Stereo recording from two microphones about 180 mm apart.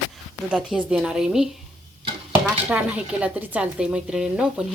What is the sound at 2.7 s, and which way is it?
Speech, 5° right (ahead or behind).